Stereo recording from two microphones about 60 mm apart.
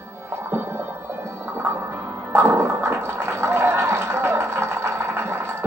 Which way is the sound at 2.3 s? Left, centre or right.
Right.